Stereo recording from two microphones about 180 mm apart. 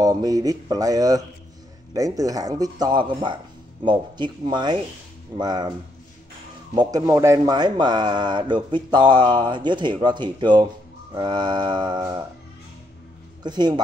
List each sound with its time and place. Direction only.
0.0 s speech: 20° right (ahead or behind)
6.7 s speech: 20° right (ahead or behind)
13.4 s speech: 25° right (ahead or behind)